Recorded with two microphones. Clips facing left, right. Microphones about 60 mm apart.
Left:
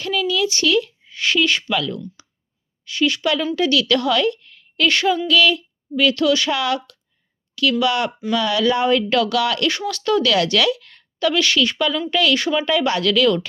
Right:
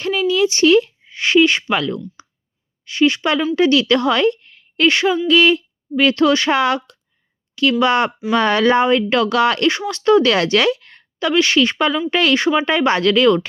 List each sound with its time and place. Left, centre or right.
0.0 s speech: right
2.2 s clicking: right
2.8 s a woman's voice: right